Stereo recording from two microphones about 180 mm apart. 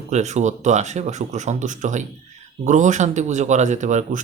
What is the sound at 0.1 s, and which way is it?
Speech, 40° right (ahead or behind).